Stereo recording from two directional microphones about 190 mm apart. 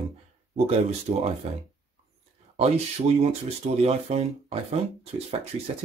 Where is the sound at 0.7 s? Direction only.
35° right (ahead or behind).